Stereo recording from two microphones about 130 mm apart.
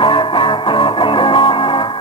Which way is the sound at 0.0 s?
40° left (ahead or behind).